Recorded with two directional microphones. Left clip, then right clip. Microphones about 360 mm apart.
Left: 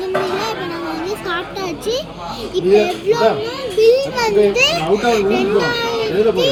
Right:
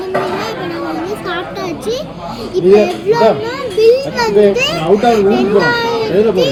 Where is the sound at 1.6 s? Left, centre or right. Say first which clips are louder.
Right 2 dB; left.